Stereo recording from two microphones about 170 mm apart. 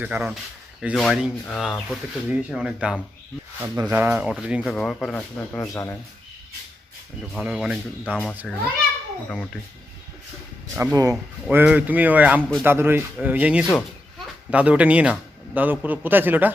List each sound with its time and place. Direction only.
0.0 s a man's voice: 5° right (ahead or behind)
3.6 s a man's voice: 15° right (ahead or behind)
4.7 s speech: 5° left (ahead or behind)
7.3 s speech: 5° right (ahead or behind)
10.9 s speech: 20° right (ahead or behind)
11.4 s a man's voice: 10° right (ahead or behind)